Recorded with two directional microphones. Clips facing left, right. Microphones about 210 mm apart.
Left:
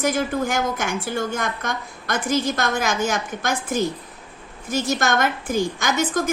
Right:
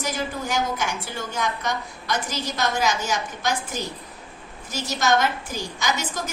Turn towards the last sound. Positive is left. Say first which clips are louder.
# left 6 dB
turn(degrees=50)  # may be behind; listen again after turning